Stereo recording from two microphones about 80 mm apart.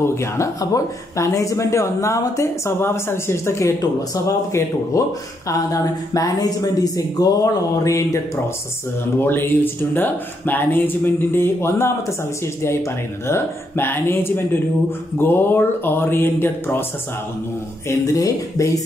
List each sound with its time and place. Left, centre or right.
0.0 s speech: left
5.5 s speech: left
9.2 s speech: left
13.3 s speech: left
17.8 s speech: left